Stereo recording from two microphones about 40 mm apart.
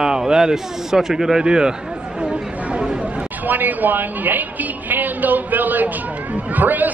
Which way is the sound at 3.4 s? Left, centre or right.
Right.